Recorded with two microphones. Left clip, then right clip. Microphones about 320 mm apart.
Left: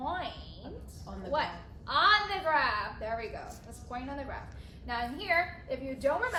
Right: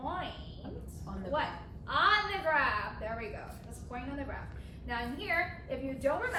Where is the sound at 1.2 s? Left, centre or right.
Left.